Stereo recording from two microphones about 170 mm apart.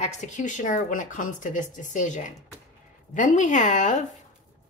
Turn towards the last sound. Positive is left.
turn(degrees=45)  # may be behind; listen again after turning